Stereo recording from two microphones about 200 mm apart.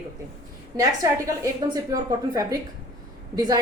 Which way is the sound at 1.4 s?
20° right (ahead or behind).